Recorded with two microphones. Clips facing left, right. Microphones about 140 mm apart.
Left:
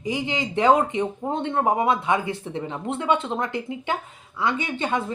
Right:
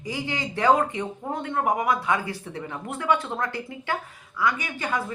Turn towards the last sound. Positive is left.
turn(degrees=25)  # may be behind; listen again after turning